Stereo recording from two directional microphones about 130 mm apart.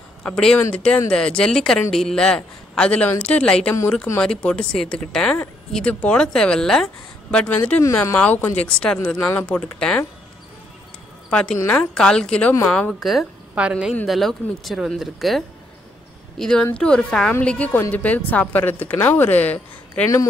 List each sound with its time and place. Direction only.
0.2 s a woman's voice: 5° left (ahead or behind)
9.6 s speech: 5° left (ahead or behind)
11.2 s a woman's voice: 5° left (ahead or behind)